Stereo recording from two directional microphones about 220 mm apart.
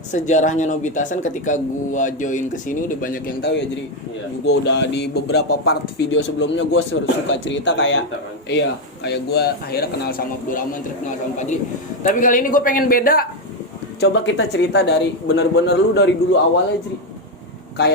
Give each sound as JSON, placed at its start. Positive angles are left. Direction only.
{"t": 0.1, "sound": "speech", "side_deg": 35}
{"t": 12.0, "sound": "speech", "side_deg": 35}
{"t": 14.0, "sound": "speech", "side_deg": 50}